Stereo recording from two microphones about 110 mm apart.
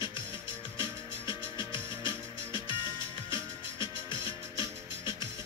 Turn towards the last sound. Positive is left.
turn(degrees=50)  # may be behind; listen again after turning